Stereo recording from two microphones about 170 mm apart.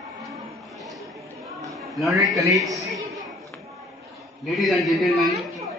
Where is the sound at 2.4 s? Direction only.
20° right (ahead or behind).